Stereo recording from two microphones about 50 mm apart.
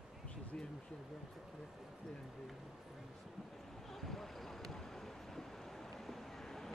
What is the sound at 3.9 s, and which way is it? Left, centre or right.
Boat, centre.